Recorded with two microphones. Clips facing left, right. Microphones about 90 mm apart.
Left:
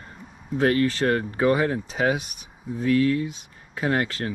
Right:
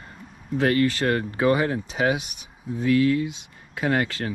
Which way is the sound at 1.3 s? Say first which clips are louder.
Even; 40° left (ahead or behind).